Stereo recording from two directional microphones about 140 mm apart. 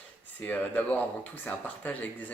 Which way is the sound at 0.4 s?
10° left (ahead or behind).